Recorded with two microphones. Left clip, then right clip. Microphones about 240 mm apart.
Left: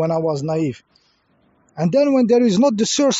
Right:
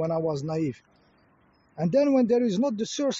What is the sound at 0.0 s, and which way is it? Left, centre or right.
Speech, left.